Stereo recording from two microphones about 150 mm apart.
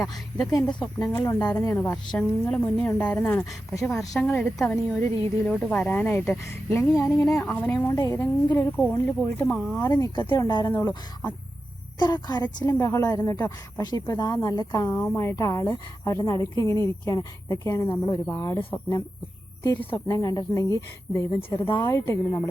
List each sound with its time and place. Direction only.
0.0 s speech: 25° left (ahead or behind)
0.7 s a woman's voice: 5° left (ahead or behind)
1.1 s speech: 20° left (ahead or behind)
1.7 s a woman's voice: 10° left (ahead or behind)
4.1 s a woman's voice: 5° left (ahead or behind)
7.3 s a woman's voice: centre (ahead or behind)
7.6 s a woman's voice: 15° left (ahead or behind)
9.6 s a woman's voice: centre (ahead or behind)
9.8 s a woman's voice: 25° left (ahead or behind)
21.8 s speech: 20° left (ahead or behind)